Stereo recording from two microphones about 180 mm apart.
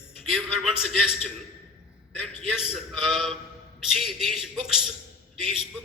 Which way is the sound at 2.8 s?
Centre (ahead or behind).